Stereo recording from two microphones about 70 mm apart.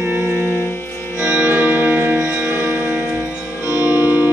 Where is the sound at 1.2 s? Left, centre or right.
Right.